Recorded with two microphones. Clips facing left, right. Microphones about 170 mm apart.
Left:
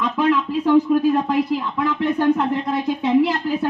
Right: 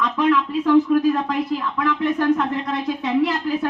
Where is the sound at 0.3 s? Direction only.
20° left (ahead or behind).